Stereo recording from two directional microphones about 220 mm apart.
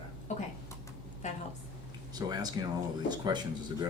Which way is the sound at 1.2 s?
35° left (ahead or behind).